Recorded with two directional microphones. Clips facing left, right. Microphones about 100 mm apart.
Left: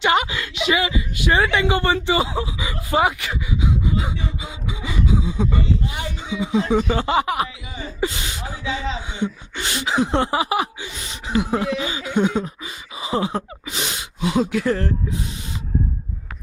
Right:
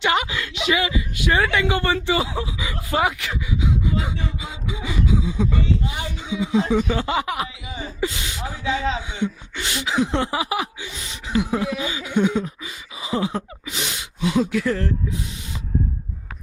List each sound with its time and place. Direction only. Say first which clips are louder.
0.0 s a sound: left 2 dB; 25° left (ahead or behind)
3.2 s gasp: left 1 dB; 20° left (ahead or behind)
6.5 s speech: left 1 dB; 40° left (ahead or behind)
8.6 s speech: right 3 dB; 45° right (ahead or behind)
9.2 s speech: left 2 dB; 40° left (ahead or behind)
12.1 s a sound: even; 30° left (ahead or behind)